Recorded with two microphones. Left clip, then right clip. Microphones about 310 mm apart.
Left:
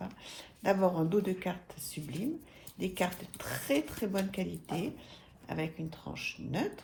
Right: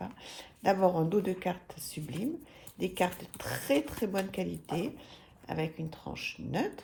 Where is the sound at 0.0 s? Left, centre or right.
Right.